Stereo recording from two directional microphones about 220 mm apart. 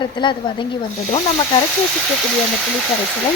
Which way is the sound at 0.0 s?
20° left (ahead or behind).